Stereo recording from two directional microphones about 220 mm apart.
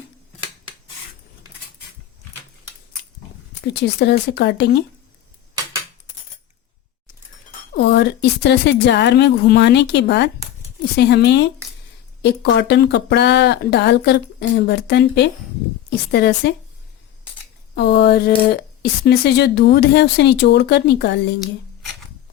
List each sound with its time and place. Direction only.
3.6 s speech: 50° left (ahead or behind)
7.8 s speech: 50° left (ahead or behind)
17.7 s speech: 50° left (ahead or behind)